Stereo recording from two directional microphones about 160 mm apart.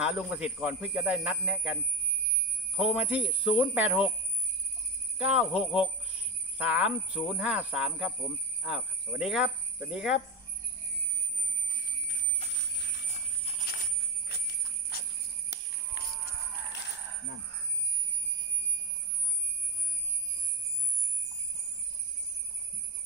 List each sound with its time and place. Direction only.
0.0 s speech: 5° right (ahead or behind)
5.2 s speech: 5° right (ahead or behind)
12.5 s a sound: 90° left
14.3 s jingle bell: 80° left
16.0 s livestock: 90° left